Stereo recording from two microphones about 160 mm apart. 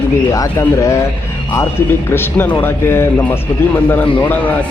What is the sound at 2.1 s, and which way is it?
Speech, 15° left (ahead or behind).